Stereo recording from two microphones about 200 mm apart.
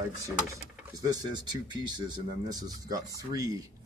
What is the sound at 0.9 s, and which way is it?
Speech, 20° right (ahead or behind).